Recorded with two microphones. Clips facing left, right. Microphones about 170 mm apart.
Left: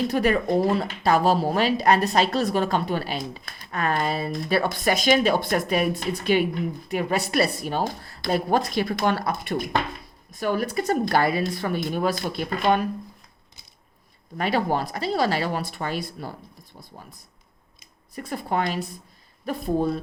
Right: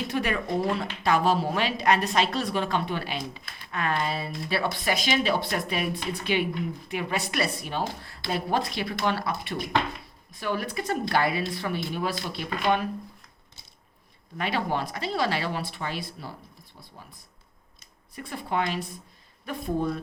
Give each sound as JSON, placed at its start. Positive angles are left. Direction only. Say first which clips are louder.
{"t": 0.1, "sound": "speech", "louder": "left 6 dB", "side_deg": 40}
{"t": 14.3, "sound": "speech", "louder": "left 4 dB", "side_deg": 40}
{"t": 18.1, "sound": "speech", "louder": "left 3 dB", "side_deg": 40}